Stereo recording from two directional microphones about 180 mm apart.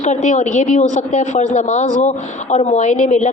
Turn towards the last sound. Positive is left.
turn(degrees=40)  # may be behind; listen again after turning